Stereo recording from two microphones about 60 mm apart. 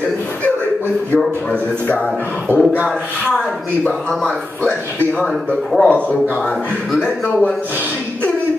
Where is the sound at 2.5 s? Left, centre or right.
Right.